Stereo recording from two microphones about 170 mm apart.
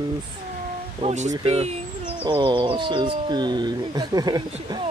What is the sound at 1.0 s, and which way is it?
Speech, 45° right (ahead or behind).